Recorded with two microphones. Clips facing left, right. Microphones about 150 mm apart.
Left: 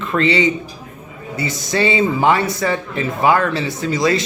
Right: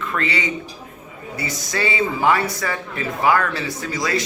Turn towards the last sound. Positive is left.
turn(degrees=25)  # may be behind; listen again after turning